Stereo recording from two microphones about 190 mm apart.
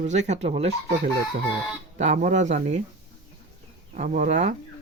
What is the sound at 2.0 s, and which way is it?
Speech, 40° right (ahead or behind).